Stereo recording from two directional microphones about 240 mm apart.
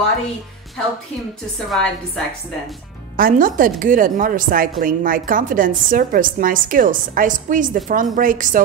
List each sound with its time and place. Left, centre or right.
1.7 s a woman's voice: centre
3.2 s a woman's voice: right